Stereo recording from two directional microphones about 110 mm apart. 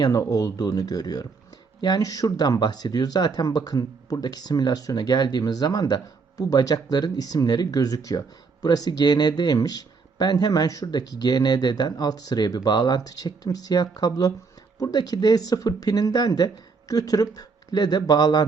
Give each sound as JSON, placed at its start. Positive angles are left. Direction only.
{"t": 0.0, "sound": "speech", "side_deg": 35}